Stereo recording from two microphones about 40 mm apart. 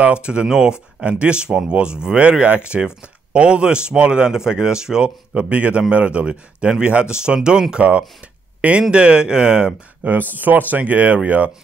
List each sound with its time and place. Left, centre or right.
0.0 s a man's voice: right
7.7 s a man's voice: right
8.9 s speech: right
10.0 s a man's voice: right